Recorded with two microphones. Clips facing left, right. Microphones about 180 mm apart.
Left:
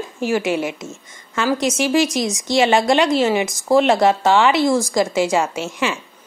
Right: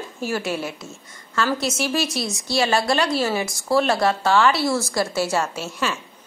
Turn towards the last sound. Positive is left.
turn(degrees=15)  # may be behind; listen again after turning